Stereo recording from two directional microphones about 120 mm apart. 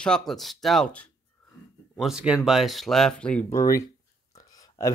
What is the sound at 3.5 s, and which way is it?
Speech, 25° left (ahead or behind).